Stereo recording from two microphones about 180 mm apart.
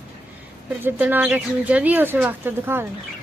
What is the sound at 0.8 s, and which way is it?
Speech, 10° right (ahead or behind).